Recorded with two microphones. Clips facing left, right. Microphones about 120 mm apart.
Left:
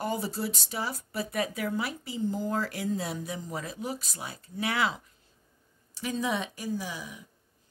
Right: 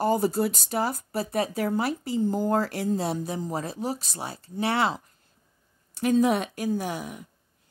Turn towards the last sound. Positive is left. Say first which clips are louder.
# right 6 dB
turn(degrees=-60)  # may be behind; listen again after turning